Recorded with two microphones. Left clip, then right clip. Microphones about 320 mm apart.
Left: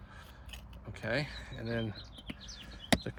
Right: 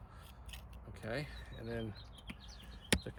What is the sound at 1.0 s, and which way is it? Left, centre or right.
Speech, left.